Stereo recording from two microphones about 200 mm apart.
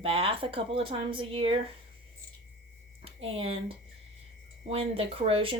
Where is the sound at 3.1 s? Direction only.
30° right (ahead or behind).